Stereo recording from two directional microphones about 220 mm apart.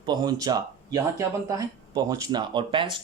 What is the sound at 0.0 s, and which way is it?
Speech, 20° right (ahead or behind).